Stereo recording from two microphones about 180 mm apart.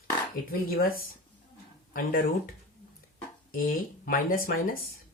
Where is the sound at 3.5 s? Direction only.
50° left (ahead or behind).